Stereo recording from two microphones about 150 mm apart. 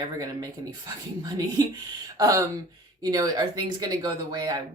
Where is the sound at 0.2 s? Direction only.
25° right (ahead or behind).